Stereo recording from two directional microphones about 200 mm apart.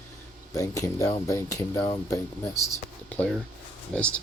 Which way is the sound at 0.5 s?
15° left (ahead or behind).